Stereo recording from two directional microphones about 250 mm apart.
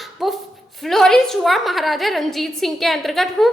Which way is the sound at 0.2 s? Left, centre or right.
Centre.